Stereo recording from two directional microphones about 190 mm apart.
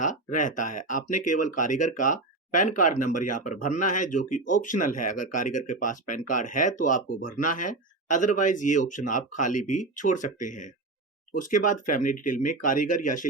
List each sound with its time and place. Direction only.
0.0 s speech: 45° left (ahead or behind)